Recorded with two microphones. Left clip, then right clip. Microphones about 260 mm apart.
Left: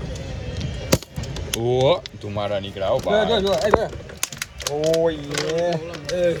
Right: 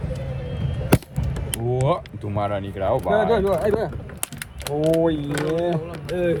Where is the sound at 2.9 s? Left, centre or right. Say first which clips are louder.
Even; right.